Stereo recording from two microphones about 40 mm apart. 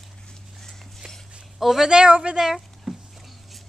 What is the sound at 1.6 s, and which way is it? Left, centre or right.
Speech, centre.